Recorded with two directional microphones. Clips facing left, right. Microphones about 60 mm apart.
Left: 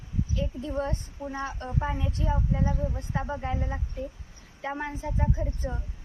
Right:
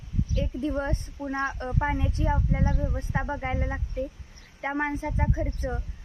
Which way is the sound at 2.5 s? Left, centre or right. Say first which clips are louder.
Right 1 dB; right.